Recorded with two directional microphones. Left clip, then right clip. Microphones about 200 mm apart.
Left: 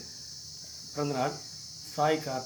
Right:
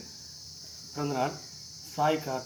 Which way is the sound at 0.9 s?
20° left (ahead or behind).